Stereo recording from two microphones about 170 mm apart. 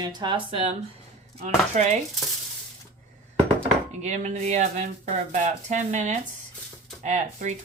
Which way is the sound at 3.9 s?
45° right (ahead or behind).